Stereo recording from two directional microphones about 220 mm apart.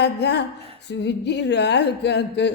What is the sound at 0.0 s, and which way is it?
A woman's voice, 50° left (ahead or behind).